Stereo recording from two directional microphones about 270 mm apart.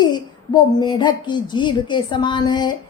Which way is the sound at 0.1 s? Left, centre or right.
Centre.